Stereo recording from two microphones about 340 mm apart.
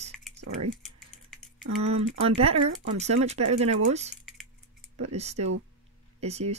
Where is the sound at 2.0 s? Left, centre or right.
Centre.